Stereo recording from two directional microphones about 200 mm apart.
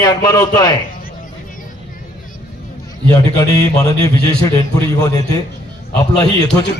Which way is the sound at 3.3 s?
20° left (ahead or behind).